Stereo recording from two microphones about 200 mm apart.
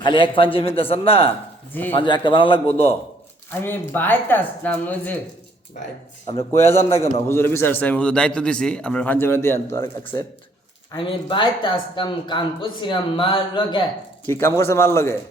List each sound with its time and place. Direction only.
0.0 s speech: 25° left (ahead or behind)
1.7 s a man's voice: 10° left (ahead or behind)
2.0 s speech: 25° left (ahead or behind)
3.5 s a man's voice: 10° left (ahead or behind)
6.2 s a man's voice: 15° left (ahead or behind)
10.9 s speech: 25° left (ahead or behind)
14.3 s a man's voice: 10° left (ahead or behind)